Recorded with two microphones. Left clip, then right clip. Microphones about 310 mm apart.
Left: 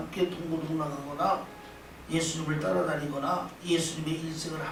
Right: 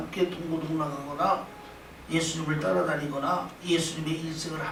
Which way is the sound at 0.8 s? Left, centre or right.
Centre.